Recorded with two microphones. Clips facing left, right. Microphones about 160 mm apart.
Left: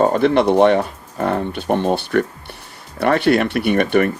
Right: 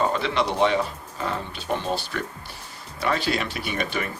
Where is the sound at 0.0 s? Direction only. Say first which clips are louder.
Left 9 dB; 50° left (ahead or behind).